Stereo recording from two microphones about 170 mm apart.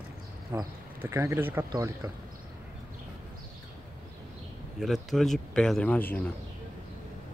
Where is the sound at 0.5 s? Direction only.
15° right (ahead or behind).